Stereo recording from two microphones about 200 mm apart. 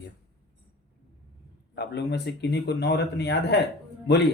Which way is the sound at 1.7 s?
55° left (ahead or behind).